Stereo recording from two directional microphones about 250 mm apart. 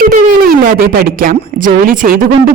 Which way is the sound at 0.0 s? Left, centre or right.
Right.